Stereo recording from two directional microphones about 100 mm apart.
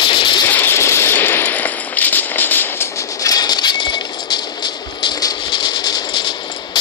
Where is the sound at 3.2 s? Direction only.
40° left (ahead or behind).